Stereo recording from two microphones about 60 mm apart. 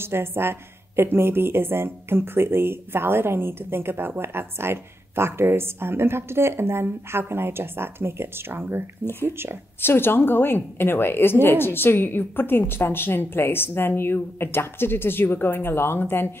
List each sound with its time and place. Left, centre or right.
0.0 s speech: right
9.8 s a woman's voice: left